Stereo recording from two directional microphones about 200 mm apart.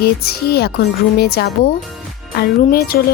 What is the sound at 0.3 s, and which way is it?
Speech, 55° left (ahead or behind).